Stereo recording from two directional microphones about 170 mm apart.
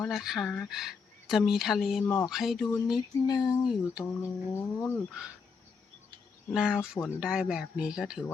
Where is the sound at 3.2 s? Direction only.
20° left (ahead or behind).